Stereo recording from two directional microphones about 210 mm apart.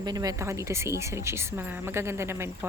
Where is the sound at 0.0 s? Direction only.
20° right (ahead or behind).